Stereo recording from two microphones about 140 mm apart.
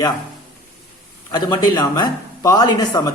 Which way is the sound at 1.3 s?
30° left (ahead or behind).